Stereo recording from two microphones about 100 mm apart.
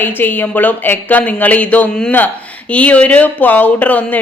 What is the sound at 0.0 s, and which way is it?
Speech, 20° left (ahead or behind).